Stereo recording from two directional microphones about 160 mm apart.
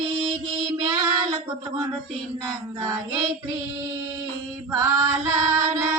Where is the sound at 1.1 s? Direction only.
25° right (ahead or behind).